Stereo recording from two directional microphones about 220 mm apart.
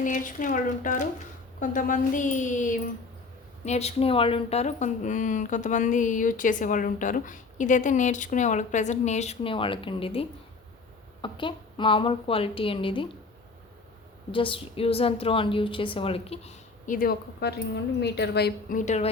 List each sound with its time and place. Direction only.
0.0 s a woman's voice: 35° left (ahead or behind)
14.3 s a woman's voice: 25° left (ahead or behind)